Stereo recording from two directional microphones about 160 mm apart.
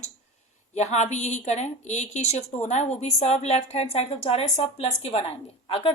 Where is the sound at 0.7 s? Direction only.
45° left (ahead or behind).